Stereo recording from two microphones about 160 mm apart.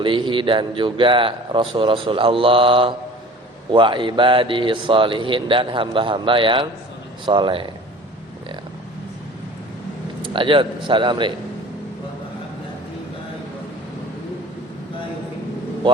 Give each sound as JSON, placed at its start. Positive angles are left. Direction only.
{"t": 0.0, "sound": "speech", "side_deg": -30}
{"t": 10.2, "sound": "speech", "side_deg": -30}